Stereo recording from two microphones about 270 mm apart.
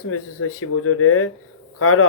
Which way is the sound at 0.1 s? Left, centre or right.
Left.